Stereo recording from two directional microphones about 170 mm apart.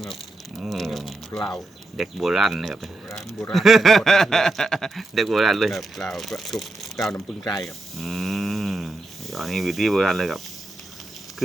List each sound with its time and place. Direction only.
0.6 s speech: centre (ahead or behind)
6.9 s speech: 20° left (ahead or behind)
7.6 s a sound: centre (ahead or behind)